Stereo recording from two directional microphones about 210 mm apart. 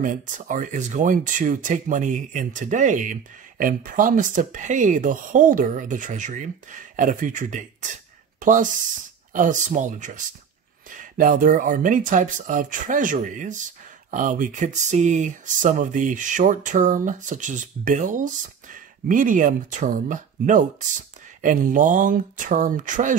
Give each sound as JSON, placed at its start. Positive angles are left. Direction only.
{"t": 0.0, "sound": "speech", "side_deg": -40}